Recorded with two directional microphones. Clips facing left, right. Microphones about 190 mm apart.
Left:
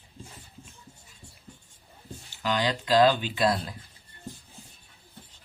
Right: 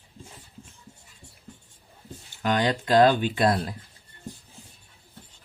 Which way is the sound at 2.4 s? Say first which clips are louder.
Right 3 dB; 50° right (ahead or behind).